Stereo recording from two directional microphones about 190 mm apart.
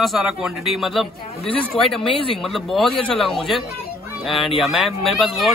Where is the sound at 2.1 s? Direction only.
30° left (ahead or behind).